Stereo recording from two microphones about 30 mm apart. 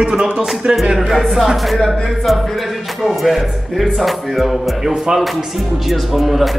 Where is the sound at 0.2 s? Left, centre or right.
Right.